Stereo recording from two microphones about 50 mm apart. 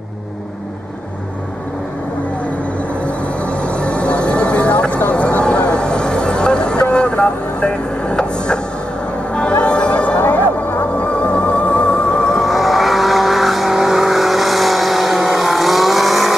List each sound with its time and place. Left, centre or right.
3.0 s music: left
10.1 s music: left
12.4 s vehicle: centre